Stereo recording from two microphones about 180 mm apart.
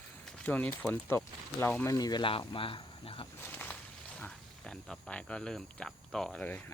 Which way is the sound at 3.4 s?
10° left (ahead or behind).